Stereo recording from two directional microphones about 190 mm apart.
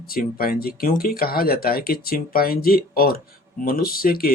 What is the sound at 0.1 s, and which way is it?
Speech, 50° left (ahead or behind).